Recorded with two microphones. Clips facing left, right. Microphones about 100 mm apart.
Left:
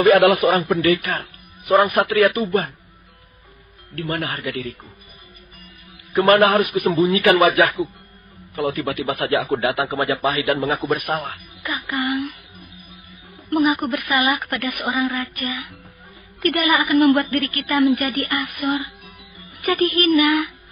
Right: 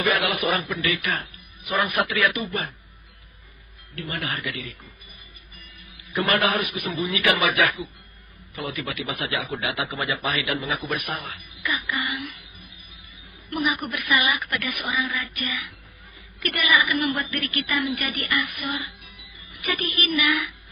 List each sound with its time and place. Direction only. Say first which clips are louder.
0.0 s a man's voice: left 10 dB; 45° left (ahead or behind)
3.9 s a man's voice: left 5 dB; 50° left (ahead or behind)
6.1 s a man's voice: left 9 dB; 40° left (ahead or behind)
11.9 s a sound: left 10 dB; 50° left (ahead or behind)
13.5 s a man's voice: left 8 dB; 40° left (ahead or behind)